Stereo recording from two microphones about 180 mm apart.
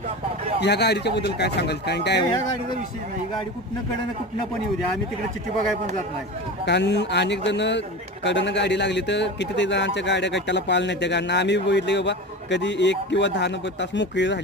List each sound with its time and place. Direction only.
0.6 s speech: 65° left (ahead or behind)
6.7 s speech: 75° left (ahead or behind)